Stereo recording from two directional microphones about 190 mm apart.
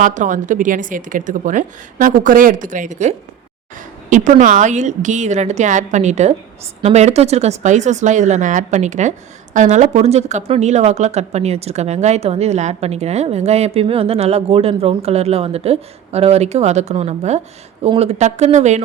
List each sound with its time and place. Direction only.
0.0 s speech: 40° right (ahead or behind)